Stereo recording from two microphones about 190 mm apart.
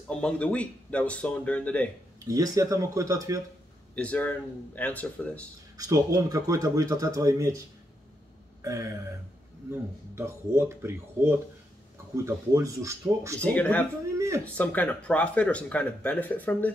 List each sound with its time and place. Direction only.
0.1 s speech: 5° left (ahead or behind)
2.2 s speech: 20° right (ahead or behind)
3.9 s speech: 5° left (ahead or behind)
5.8 s speech: 20° right (ahead or behind)
9.7 s speech: 15° right (ahead or behind)
13.4 s speech: 10° left (ahead or behind)
14.1 s a sound: 15° right (ahead or behind)
14.4 s speech: 10° left (ahead or behind)